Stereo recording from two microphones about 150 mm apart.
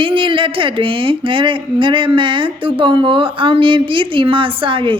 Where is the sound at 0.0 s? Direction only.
35° right (ahead or behind).